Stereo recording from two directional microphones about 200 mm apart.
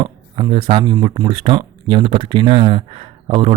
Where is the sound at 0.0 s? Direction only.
25° right (ahead or behind).